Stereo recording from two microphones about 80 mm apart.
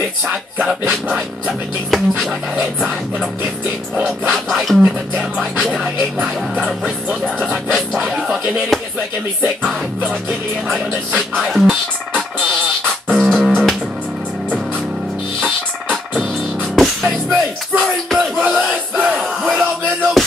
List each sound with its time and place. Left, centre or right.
0.3 s music: centre
1.9 s music: centre
3.9 s music: centre
4.3 s music: centre
10.7 s music: centre
13.2 s music: centre
15.4 s music: centre
18.5 s a sound: centre
20.2 s music: centre